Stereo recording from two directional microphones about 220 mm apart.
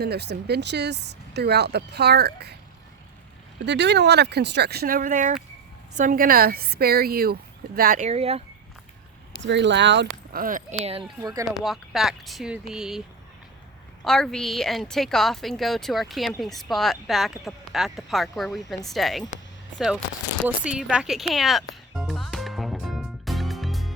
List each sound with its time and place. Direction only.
0.0 s speech: 50° right (ahead or behind)
3.6 s speech: 50° right (ahead or behind); by 8.4 s 25° right (ahead or behind)
9.4 s speech: 55° right (ahead or behind)
10.3 s speech: 40° right (ahead or behind)
11.2 s speech: 15° right (ahead or behind)
11.4 s speech: centre (ahead or behind)
14.0 s speech: centre (ahead or behind)
20.7 s music: 5° right (ahead or behind)